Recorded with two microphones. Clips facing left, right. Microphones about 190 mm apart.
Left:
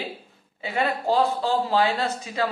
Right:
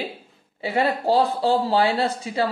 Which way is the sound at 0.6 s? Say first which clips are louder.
Right 3 dB; 35° right (ahead or behind).